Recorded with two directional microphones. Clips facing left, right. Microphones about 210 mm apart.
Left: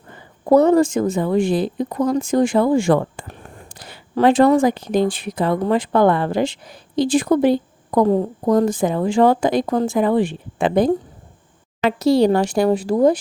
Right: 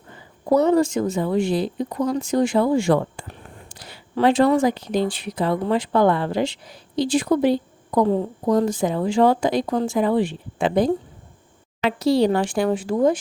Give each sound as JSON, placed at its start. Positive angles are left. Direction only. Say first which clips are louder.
{"t": 0.1, "sound": "a woman's voice", "louder": "left 5 dB", "side_deg": 50}